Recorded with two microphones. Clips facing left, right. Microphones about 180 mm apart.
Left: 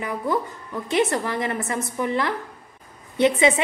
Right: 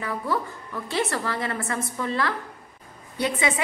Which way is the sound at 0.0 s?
20° left (ahead or behind).